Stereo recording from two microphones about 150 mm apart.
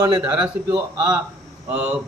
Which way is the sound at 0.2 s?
10° right (ahead or behind).